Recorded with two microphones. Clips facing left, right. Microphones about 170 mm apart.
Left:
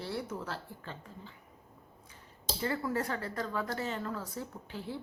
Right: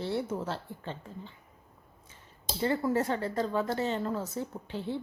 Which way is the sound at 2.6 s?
25° right (ahead or behind).